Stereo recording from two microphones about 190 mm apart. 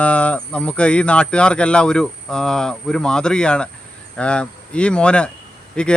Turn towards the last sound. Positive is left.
turn(degrees=5)  # may be behind; listen again after turning